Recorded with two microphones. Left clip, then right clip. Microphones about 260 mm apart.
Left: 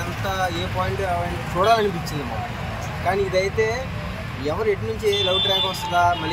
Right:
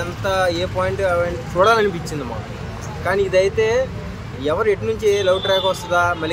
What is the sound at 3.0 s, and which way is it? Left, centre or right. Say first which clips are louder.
Speech: right 5 dB; right.